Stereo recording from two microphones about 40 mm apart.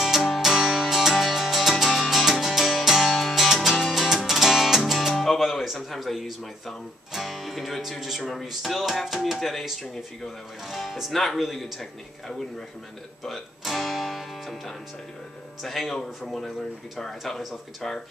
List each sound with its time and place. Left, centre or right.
0.0 s music: centre
4.9 s music: centre
5.9 s speech: centre
15.6 s speech: centre
17.2 s speech: centre